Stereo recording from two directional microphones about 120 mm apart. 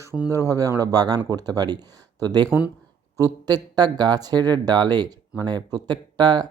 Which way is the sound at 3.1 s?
30° right (ahead or behind).